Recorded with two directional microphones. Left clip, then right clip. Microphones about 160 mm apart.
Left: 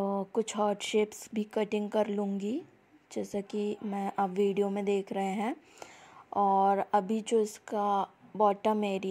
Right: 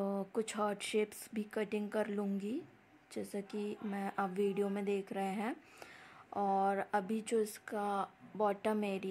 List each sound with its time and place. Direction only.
0.0 s speech: 15° left (ahead or behind)